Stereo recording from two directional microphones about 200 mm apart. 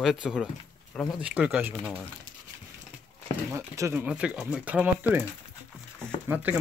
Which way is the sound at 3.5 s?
15° right (ahead or behind).